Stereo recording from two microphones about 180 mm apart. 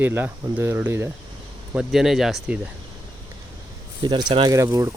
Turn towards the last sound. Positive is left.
turn(degrees=-20)  # may be behind; listen again after turning